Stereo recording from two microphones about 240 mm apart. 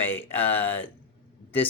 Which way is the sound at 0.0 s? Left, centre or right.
Centre.